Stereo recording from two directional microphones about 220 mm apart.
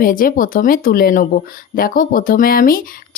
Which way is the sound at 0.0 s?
40° left (ahead or behind).